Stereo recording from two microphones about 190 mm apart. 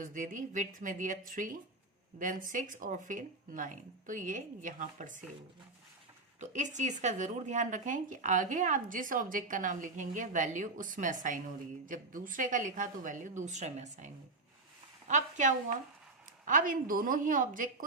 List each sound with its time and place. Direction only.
0.0 s speech: 45° right (ahead or behind)
6.4 s a woman's voice: 40° right (ahead or behind)